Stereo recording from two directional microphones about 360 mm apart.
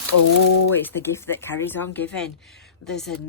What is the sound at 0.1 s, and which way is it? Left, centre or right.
Speech, left.